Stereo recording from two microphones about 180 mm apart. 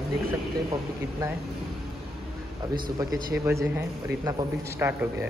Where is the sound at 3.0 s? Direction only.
20° right (ahead or behind).